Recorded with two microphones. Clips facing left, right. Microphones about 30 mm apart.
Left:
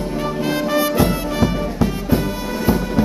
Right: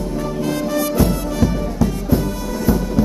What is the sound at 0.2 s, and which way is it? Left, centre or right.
Music, left.